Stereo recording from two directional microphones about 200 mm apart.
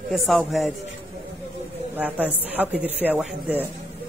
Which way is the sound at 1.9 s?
10° right (ahead or behind).